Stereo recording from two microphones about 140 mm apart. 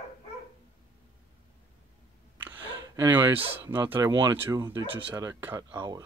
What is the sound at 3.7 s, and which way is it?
Speech, 15° right (ahead or behind).